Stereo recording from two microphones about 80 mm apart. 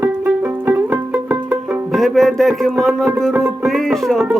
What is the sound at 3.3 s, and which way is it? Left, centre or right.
Music, right.